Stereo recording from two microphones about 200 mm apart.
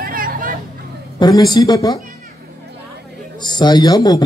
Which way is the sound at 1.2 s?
20° left (ahead or behind).